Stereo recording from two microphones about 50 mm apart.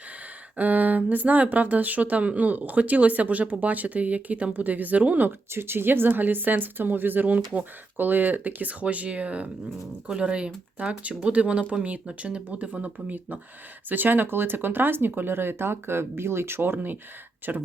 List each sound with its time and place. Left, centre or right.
0.5 s speech: right
5.5 s speech: right